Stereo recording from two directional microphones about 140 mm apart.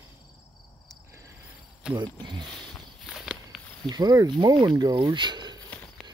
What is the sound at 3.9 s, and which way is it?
Speech, 30° right (ahead or behind).